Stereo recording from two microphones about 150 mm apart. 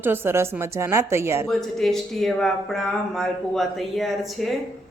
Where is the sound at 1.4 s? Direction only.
Centre (ahead or behind).